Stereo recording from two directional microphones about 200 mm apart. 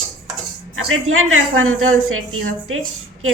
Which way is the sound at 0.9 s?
90° right.